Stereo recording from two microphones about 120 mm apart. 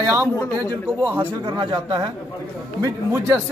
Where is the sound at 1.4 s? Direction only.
35° right (ahead or behind).